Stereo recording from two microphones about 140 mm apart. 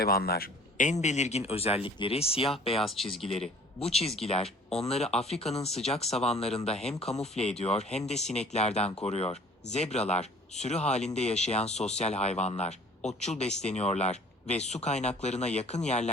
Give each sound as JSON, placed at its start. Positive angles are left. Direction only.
{"t": 0.0, "sound": "speech", "side_deg": 90}
{"t": 2.7, "sound": "speech", "side_deg": 0}
{"t": 3.8, "sound": "speech", "side_deg": 45}